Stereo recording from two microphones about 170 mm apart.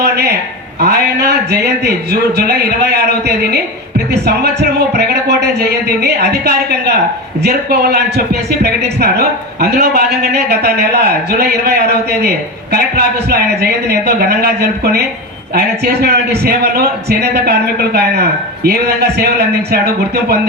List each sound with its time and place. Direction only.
0.0 s a man's voice: 70° right (ahead or behind)